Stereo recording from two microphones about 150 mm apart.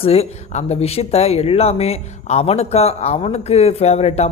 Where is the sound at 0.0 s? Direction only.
40° left (ahead or behind).